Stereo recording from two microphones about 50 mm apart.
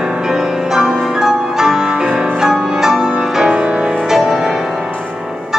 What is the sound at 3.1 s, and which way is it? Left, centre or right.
Music, centre.